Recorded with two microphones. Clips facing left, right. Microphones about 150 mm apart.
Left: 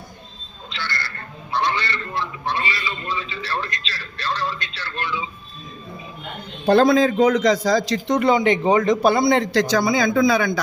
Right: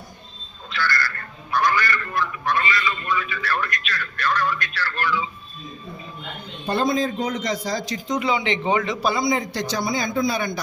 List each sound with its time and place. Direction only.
0.7 s speech: 25° left (ahead or behind)
6.7 s a man's voice: 90° left; by 8.3 s 65° left (ahead or behind)
8.3 s a man's voice: 45° left (ahead or behind); by 9.8 s 90° left